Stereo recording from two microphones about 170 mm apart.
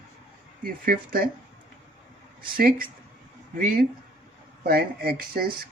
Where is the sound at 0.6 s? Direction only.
60° right (ahead or behind).